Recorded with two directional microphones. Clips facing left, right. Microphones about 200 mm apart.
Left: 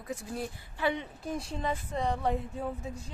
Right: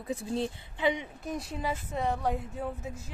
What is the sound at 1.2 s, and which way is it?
Speech, centre (ahead or behind).